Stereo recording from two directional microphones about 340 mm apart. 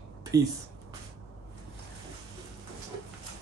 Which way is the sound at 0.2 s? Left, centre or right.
Centre.